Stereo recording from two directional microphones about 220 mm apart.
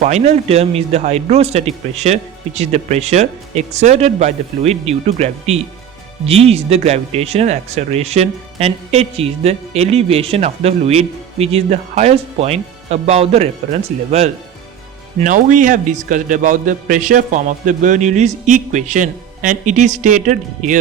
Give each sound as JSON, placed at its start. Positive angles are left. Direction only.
{"t": 0.0, "sound": "speech", "side_deg": -30}
{"t": 15.2, "sound": "a man's voice", "side_deg": -35}